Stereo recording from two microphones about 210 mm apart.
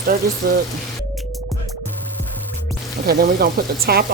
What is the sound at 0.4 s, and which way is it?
Speech, 45° right (ahead or behind).